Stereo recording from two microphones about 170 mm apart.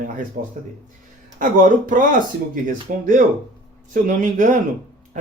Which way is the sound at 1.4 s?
50° right (ahead or behind).